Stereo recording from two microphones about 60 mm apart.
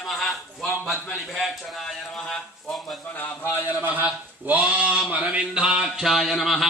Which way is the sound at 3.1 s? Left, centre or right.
Left.